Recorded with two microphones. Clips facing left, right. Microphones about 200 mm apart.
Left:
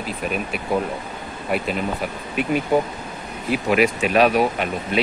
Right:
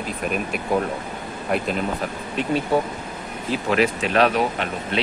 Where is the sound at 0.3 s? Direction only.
Centre (ahead or behind).